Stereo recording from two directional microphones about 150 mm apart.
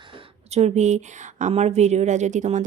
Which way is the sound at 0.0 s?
35° right (ahead or behind).